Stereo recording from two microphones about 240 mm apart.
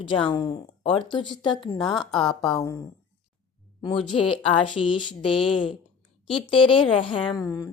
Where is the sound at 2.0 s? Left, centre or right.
Centre.